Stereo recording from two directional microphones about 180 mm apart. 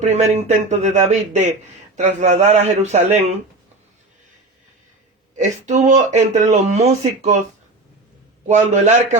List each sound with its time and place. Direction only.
0.0 s speech: 40° right (ahead or behind)
5.4 s speech: 40° right (ahead or behind)
8.4 s speech: 40° right (ahead or behind)